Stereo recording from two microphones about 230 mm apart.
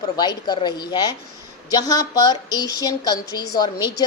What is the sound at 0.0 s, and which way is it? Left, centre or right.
A woman's voice, centre.